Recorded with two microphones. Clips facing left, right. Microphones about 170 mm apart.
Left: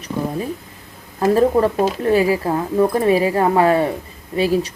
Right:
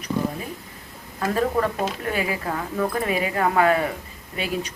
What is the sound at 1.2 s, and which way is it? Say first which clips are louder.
Speech: left 8 dB; 30° left (ahead or behind).